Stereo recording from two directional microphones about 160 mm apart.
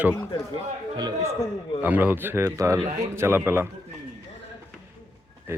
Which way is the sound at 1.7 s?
10° right (ahead or behind).